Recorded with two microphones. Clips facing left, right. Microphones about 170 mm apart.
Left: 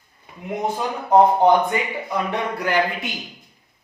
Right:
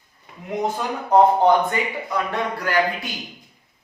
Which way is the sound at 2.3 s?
20° left (ahead or behind).